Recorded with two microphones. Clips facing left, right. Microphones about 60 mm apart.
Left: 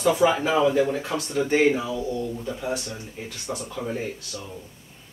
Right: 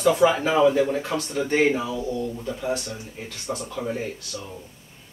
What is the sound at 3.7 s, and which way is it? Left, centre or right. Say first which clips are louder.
Speech: even; centre.